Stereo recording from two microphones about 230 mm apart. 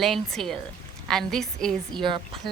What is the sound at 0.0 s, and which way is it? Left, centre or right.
A woman's voice, centre.